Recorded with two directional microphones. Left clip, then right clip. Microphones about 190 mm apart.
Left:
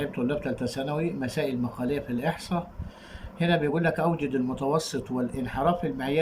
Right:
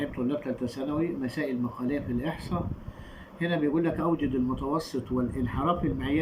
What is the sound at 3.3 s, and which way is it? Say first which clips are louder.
Speech: left 2 dB; 65° left (ahead or behind).